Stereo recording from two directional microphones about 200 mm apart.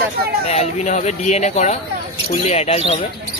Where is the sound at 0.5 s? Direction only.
35° left (ahead or behind).